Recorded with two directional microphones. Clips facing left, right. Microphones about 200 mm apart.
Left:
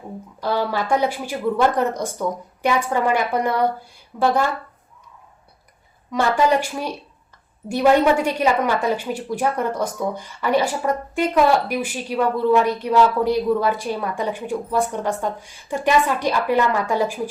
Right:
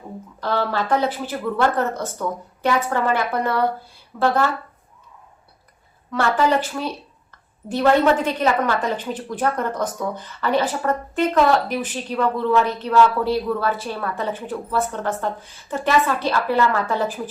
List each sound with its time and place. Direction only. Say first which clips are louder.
0.4 s a woman's voice: left 1 dB; 10° left (ahead or behind)
6.1 s a woman's voice: left 1 dB; 15° left (ahead or behind)